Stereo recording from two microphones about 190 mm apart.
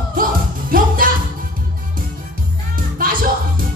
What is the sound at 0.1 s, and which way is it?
Music, 50° right (ahead or behind).